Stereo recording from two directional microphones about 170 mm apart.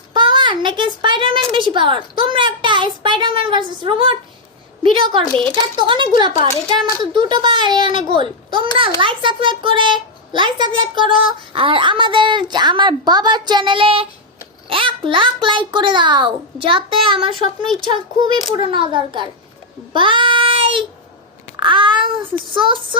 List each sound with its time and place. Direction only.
0.1 s a woman's voice: 30° right (ahead or behind)
18.5 s a child's voice: 30° right (ahead or behind)
19.9 s child singing: 30° right (ahead or behind)
21.5 s a child's voice: 30° right (ahead or behind)